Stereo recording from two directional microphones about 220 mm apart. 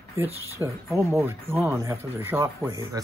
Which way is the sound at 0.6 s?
15° right (ahead or behind).